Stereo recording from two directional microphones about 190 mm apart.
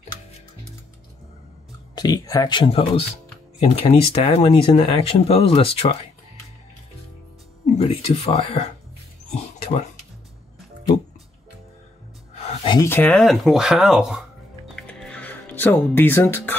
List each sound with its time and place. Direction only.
2.0 s speech: 20° left (ahead or behind)
7.7 s speech: 35° left (ahead or behind)
9.3 s dog: 30° left (ahead or behind)
12.4 s a sound: 25° left (ahead or behind)
12.8 s speech: 10° left (ahead or behind)
14.8 s music: 5° left (ahead or behind)